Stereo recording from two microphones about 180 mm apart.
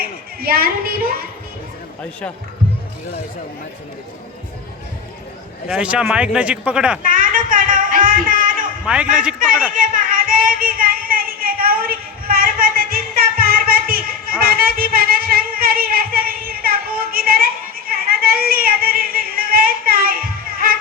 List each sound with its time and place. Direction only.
0.0 s a woman's voice: 55° right (ahead or behind)
5.6 s speech: 5° right (ahead or behind)
7.0 s music: 50° right (ahead or behind)
8.8 s a man's voice: 5° right (ahead or behind)
9.7 s child singing: 50° right (ahead or behind)